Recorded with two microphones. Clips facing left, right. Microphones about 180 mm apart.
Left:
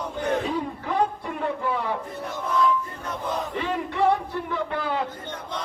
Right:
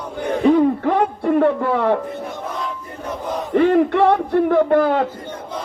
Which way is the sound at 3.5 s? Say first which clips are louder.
Right 14 dB; 60° right (ahead or behind).